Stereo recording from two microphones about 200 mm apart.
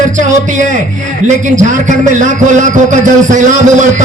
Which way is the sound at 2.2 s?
40° right (ahead or behind).